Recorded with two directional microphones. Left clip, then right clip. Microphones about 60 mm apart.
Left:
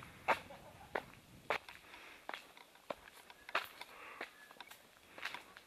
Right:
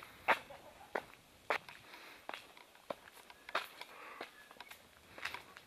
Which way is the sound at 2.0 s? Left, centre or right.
Centre.